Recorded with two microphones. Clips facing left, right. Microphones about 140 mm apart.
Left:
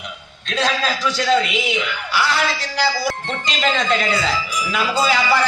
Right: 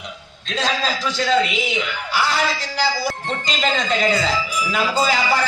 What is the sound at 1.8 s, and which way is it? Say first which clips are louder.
Speech: even; 45° right (ahead or behind).